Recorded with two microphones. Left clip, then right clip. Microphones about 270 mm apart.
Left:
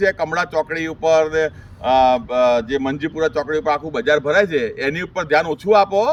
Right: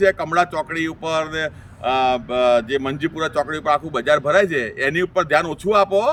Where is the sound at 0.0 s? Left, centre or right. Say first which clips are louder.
Right 1 dB; centre.